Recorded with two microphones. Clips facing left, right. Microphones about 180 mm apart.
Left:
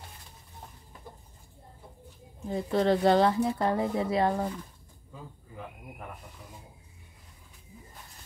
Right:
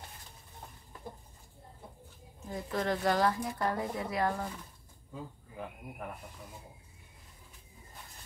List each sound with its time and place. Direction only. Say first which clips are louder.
2.5 s speech: left 8 dB; 30° left (ahead or behind)